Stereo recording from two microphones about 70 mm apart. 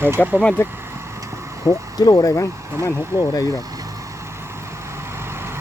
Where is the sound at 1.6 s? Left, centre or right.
Left.